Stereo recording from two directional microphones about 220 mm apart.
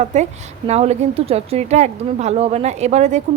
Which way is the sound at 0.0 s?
30° right (ahead or behind).